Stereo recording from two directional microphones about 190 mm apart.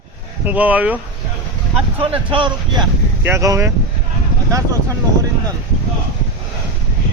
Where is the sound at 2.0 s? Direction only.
25° right (ahead or behind).